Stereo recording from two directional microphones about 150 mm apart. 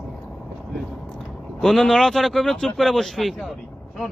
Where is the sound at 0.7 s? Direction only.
Centre (ahead or behind).